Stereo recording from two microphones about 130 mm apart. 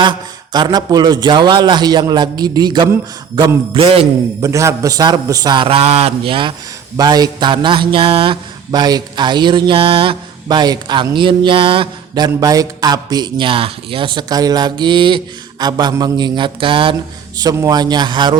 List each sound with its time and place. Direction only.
0.0 s mantra: 35° right (ahead or behind)
3.8 s mantra: 45° right (ahead or behind)
4.4 s a man's voice: 25° right (ahead or behind)
5.6 s mantra: 50° right (ahead or behind)
6.9 s mantra: 30° right (ahead or behind)
17.3 s mantra: 25° right (ahead or behind)